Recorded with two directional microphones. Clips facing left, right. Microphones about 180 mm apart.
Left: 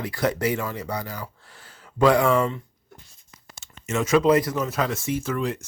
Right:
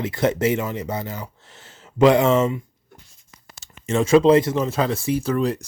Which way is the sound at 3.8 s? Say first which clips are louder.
Right 5 dB; 30° right (ahead or behind).